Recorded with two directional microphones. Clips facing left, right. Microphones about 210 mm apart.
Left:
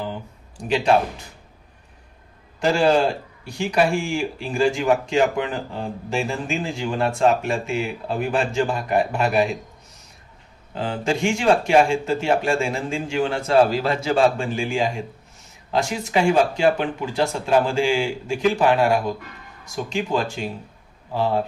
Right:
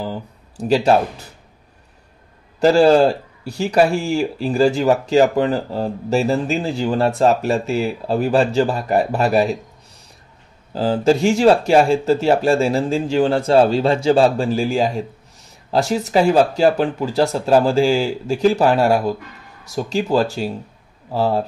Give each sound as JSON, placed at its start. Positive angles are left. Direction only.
{"t": 0.0, "sound": "speech", "side_deg": -40}
{"t": 2.6, "sound": "a man's voice", "side_deg": -35}
{"t": 10.7, "sound": "a man's voice", "side_deg": -35}